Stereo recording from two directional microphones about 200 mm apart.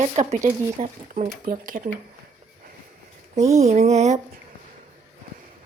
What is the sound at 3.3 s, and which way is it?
Speech, 35° right (ahead or behind).